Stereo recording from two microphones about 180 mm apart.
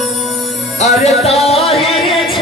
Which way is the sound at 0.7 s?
40° left (ahead or behind).